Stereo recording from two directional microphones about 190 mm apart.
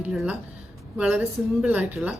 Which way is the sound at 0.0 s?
5° right (ahead or behind).